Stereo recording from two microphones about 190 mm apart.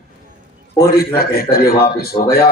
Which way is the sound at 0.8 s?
55° left (ahead or behind).